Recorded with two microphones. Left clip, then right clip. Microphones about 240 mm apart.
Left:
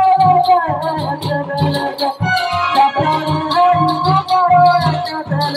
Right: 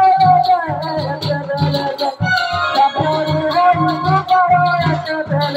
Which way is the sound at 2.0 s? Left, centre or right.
Left.